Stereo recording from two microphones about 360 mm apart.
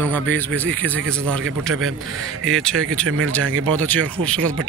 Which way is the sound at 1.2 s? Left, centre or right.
Right.